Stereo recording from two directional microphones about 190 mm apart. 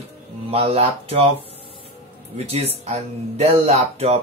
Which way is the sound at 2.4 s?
35° right (ahead or behind).